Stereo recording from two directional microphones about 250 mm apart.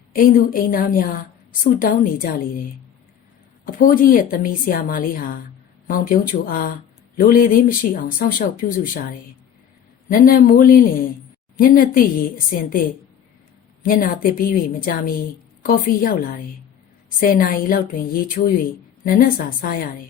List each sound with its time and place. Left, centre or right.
0.1 s speech: left
3.7 s speech: left
13.8 s speech: left